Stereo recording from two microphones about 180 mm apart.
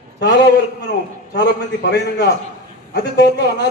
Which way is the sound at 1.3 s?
70° left (ahead or behind).